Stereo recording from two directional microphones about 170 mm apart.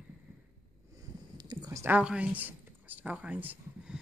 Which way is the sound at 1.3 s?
25° right (ahead or behind).